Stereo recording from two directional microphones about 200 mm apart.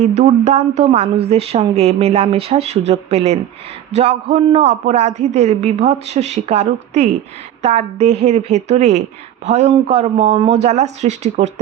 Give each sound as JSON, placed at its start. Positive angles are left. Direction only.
{"t": 0.0, "sound": "a man's voice", "side_deg": -35}